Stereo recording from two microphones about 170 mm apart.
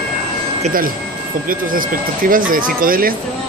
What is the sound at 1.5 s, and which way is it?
Speech, 55° right (ahead or behind).